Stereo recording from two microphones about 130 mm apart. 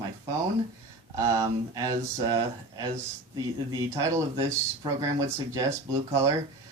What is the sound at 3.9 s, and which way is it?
Speech, 25° right (ahead or behind).